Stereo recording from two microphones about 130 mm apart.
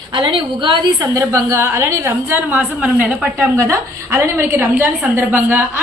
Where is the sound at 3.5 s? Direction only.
25° right (ahead or behind).